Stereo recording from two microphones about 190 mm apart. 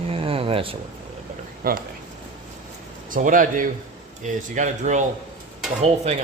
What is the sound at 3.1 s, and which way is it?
Speech, 45° right (ahead or behind).